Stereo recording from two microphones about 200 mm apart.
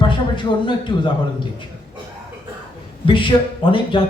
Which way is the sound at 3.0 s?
25° left (ahead or behind).